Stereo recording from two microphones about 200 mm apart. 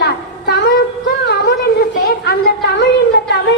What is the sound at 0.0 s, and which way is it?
Child singing, 55° left (ahead or behind).